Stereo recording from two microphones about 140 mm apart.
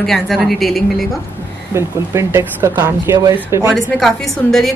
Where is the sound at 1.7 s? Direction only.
20° right (ahead or behind).